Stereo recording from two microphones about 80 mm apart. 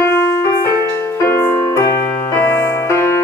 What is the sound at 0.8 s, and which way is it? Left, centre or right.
Music, left.